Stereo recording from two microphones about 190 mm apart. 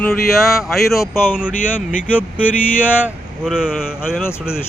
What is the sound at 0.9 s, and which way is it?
Speech, 15° left (ahead or behind).